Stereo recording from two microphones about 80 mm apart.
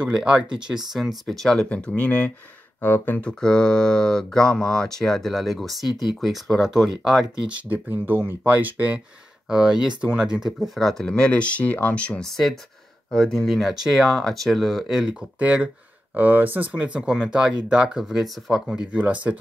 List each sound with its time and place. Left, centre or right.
0.0 s speech: centre
0.9 s speech: centre; by 3.3 s left
3.3 s speech: centre
8.5 s speech: centre
9.5 s speech: centre
18.9 s speech: centre